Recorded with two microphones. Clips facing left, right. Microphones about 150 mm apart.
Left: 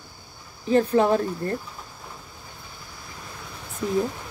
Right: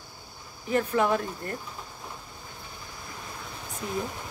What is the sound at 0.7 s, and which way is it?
Speech, 35° left (ahead or behind).